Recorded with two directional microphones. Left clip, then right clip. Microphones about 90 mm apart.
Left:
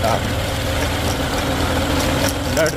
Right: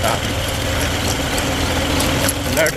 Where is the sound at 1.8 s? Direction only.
10° left (ahead or behind).